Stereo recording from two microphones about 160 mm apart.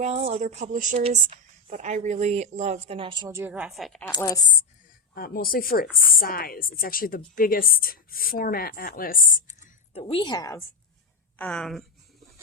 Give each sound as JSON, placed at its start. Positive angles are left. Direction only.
{"t": 0.0, "sound": "speech", "side_deg": -40}
{"t": 0.9, "sound": "speech", "side_deg": -40}
{"t": 3.0, "sound": "a woman's voice", "side_deg": -30}
{"t": 3.2, "sound": "a woman's voice", "side_deg": -15}
{"t": 4.1, "sound": "a woman's voice", "side_deg": 25}
{"t": 5.1, "sound": "a woman's voice", "side_deg": 70}
{"t": 9.9, "sound": "a woman's voice", "side_deg": 35}
{"t": 11.3, "sound": "speech", "side_deg": 10}